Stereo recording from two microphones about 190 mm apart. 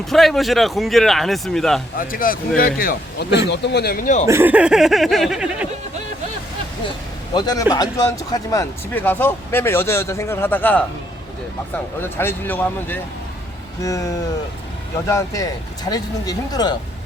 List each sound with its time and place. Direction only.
0.0 s speech: centre (ahead or behind)
2.0 s speech: 50° left (ahead or behind)
4.3 s speech: 10° right (ahead or behind)
7.3 s speech: 20° left (ahead or behind)
12.0 s speech: 10° left (ahead or behind)